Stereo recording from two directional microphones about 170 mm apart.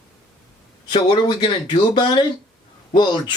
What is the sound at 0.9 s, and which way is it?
Speech, 30° left (ahead or behind).